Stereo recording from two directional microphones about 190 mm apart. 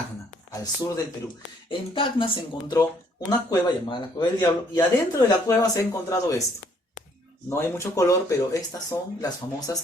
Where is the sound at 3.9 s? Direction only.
20° left (ahead or behind).